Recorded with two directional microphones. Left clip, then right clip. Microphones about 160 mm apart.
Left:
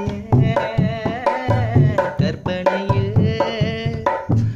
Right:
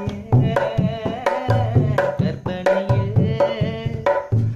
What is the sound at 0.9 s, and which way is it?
Tabla, 20° left (ahead or behind).